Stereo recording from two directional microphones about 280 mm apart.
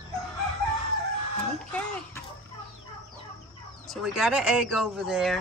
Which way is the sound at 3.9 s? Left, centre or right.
Centre.